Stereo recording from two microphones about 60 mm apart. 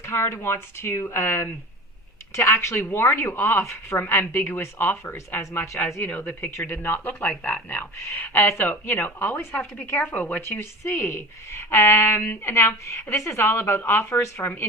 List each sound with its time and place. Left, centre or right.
0.0 s a woman's voice: left
2.8 s a woman's voice: left
4.1 s speech: left
5.1 s a woman's voice: left
6.1 s a woman's voice: left
8.0 s a woman's voice: left
8.5 s speech: left
10.0 s a woman's voice: left
10.4 s a woman's voice: left